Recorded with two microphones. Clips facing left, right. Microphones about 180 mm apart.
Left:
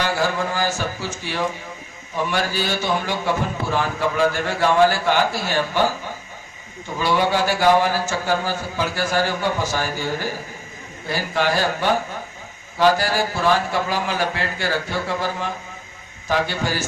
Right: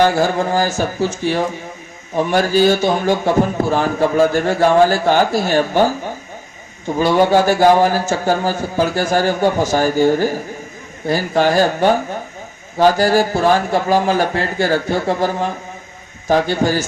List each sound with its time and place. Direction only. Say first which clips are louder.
0.0 s a man's voice: right 7 dB; 45° right (ahead or behind)
7.0 s a man's voice: right 7 dB; 45° right (ahead or behind)